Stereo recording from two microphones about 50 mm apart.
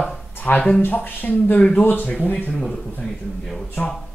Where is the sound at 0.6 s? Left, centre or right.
Left.